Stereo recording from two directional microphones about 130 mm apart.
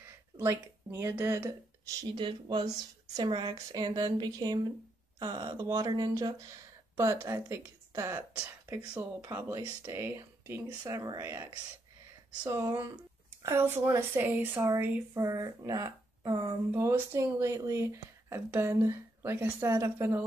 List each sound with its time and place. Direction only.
0.4 s speech: 20° right (ahead or behind)
2.1 s speech: 35° right (ahead or behind)
12.4 s a woman's voice: 20° right (ahead or behind)
14.6 s speech: 25° right (ahead or behind)
16.7 s speech: 20° right (ahead or behind)